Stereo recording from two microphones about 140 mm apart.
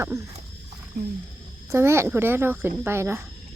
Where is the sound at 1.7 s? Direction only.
20° right (ahead or behind).